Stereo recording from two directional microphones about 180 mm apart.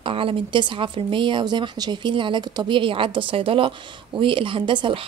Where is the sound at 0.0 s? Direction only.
30° right (ahead or behind).